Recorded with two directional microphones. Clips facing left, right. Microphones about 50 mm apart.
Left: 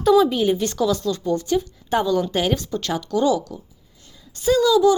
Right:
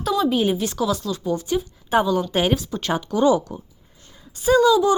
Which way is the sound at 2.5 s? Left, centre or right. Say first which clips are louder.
Right 1 dB; centre.